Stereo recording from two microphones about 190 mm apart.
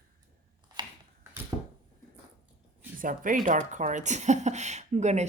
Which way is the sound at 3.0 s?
45° right (ahead or behind).